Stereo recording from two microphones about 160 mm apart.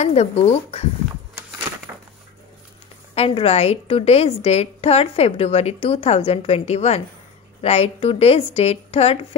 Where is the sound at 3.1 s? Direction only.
35° left (ahead or behind).